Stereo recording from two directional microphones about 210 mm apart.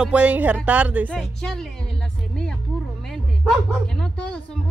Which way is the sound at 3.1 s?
Centre (ahead or behind).